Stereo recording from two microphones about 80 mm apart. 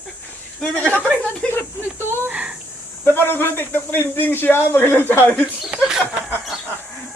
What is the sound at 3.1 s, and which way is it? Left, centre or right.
A man's voice, left.